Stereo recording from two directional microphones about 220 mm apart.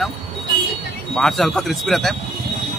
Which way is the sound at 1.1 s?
Centre (ahead or behind).